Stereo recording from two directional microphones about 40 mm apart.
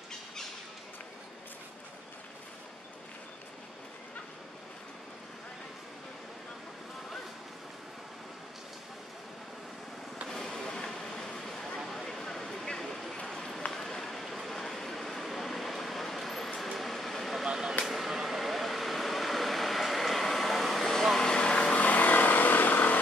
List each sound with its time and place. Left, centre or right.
10.2 s vehicle: centre
11.9 s a sound: centre
16.7 s vehicle: centre
17.5 s a sound: centre
17.8 s vehicle: centre
21.2 s vehicle: left
21.7 s vehicle: left